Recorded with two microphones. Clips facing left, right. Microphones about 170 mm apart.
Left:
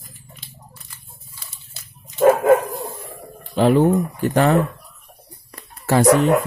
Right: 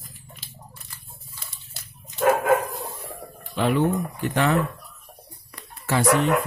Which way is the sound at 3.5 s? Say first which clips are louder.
Left 7 dB; 35° left (ahead or behind).